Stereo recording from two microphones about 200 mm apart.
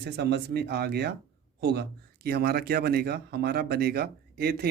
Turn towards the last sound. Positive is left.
turn(degrees=-50)  # may be behind; listen again after turning